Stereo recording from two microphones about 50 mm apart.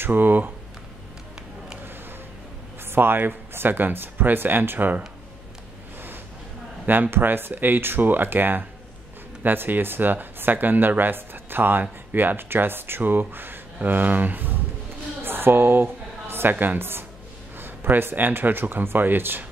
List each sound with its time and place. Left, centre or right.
0.0 s speech: right
2.9 s speech: right
6.9 s speech: right
15.2 s a woman's voice: right